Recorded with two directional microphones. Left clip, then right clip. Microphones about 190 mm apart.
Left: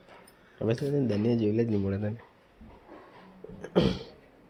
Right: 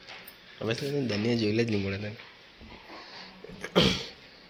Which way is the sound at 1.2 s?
30° left (ahead or behind).